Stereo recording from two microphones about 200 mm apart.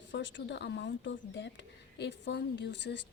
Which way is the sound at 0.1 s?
65° left (ahead or behind).